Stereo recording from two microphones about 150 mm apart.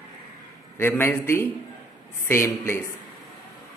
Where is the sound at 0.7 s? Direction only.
15° left (ahead or behind).